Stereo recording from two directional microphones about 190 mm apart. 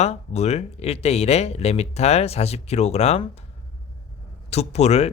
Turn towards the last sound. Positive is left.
turn(degrees=35)  # may be behind; listen again after turning